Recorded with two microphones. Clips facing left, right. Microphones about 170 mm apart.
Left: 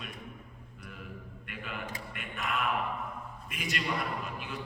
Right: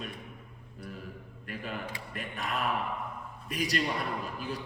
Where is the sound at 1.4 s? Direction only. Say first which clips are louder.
Right 4 dB; 35° right (ahead or behind).